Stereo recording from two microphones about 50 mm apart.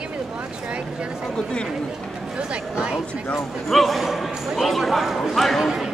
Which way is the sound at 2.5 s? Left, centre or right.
Centre.